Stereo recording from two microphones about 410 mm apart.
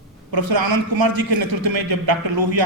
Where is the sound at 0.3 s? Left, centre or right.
Right.